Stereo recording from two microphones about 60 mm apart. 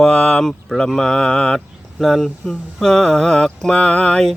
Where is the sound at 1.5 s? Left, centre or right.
Centre.